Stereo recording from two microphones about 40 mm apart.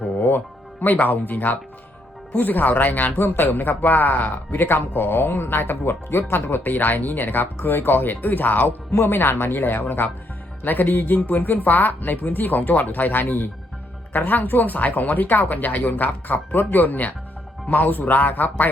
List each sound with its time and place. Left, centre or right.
0.2 s a man's voice: left
9.0 s a man's voice: left